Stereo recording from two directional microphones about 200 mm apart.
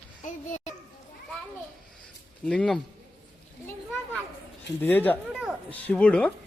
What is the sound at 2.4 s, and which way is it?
Speech, 5° left (ahead or behind).